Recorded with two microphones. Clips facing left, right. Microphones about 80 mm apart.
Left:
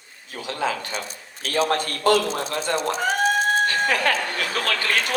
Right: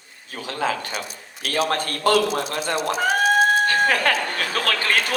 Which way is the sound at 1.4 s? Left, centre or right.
Left.